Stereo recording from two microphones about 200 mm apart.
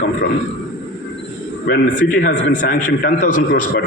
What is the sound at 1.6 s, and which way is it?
A man's voice, 45° left (ahead or behind).